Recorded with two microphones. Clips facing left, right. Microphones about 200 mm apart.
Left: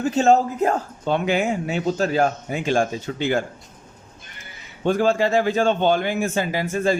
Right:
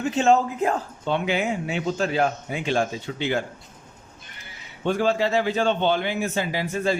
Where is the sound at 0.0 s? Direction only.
40° left (ahead or behind).